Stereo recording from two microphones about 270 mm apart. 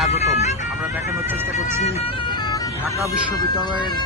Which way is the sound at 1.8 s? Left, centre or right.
Centre.